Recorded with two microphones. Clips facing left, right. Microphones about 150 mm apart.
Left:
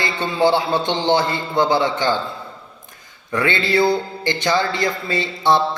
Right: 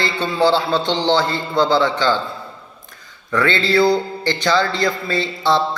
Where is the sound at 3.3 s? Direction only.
20° left (ahead or behind).